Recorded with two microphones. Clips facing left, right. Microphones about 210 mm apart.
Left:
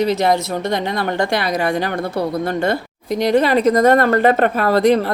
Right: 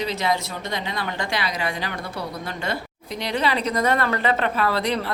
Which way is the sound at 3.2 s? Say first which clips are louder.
Left 10 dB; 50° left (ahead or behind).